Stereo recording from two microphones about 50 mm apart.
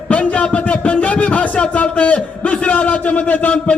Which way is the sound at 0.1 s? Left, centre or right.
Left.